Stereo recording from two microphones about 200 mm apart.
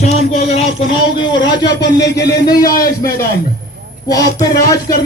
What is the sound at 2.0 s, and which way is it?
Music, 55° left (ahead or behind).